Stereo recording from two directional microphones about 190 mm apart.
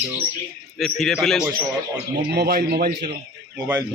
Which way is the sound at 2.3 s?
55° right (ahead or behind).